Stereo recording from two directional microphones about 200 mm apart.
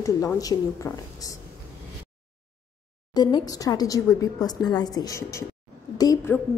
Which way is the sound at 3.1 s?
20° left (ahead or behind).